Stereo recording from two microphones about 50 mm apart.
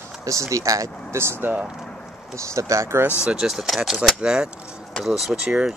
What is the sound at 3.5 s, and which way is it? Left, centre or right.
Speech, centre.